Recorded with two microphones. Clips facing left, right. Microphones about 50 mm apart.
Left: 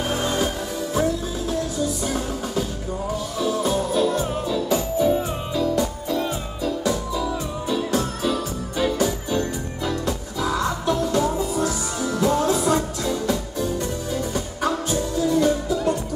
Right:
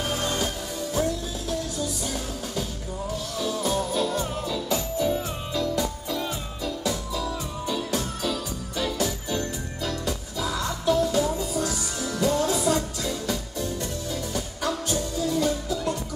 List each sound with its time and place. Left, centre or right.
0.1 s music: centre